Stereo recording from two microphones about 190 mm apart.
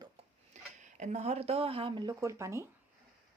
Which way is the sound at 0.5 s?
40° right (ahead or behind).